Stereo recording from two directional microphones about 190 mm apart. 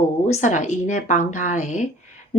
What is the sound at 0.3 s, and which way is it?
Speech, 40° left (ahead or behind).